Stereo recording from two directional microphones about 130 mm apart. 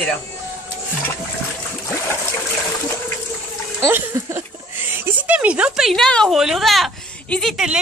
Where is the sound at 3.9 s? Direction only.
15° right (ahead or behind).